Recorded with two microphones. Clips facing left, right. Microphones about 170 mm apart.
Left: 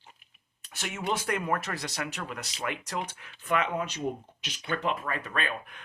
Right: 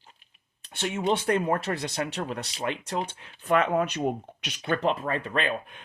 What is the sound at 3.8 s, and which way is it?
Speech, 65° right (ahead or behind).